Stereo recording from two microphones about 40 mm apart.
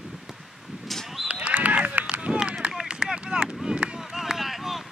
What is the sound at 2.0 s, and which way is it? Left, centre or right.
Run, right.